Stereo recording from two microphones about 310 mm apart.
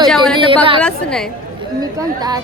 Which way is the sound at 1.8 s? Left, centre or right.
Centre.